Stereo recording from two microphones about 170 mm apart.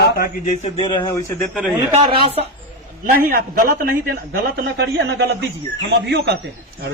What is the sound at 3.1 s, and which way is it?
A man's voice, 60° right (ahead or behind).